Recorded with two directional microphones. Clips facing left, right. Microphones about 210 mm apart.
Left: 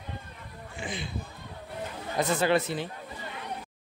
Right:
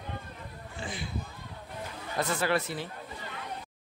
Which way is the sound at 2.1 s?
20° left (ahead or behind).